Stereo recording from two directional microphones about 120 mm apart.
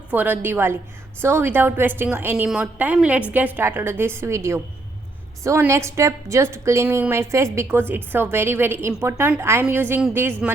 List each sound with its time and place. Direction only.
0.1 s a woman's voice: 15° right (ahead or behind)